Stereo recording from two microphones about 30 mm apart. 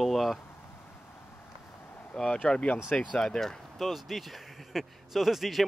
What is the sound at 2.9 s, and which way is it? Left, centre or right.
Speech, left.